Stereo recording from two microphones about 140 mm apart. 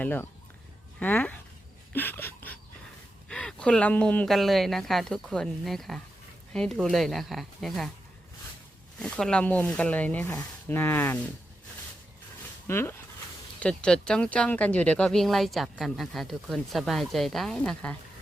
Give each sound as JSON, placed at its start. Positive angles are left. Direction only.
{"t": 0.0, "sound": "speech", "side_deg": 15}
{"t": 1.9, "sound": "a sound", "side_deg": 15}
{"t": 3.2, "sound": "speech", "side_deg": 5}
{"t": 9.0, "sound": "speech", "side_deg": 5}
{"t": 12.6, "sound": "speech", "side_deg": 15}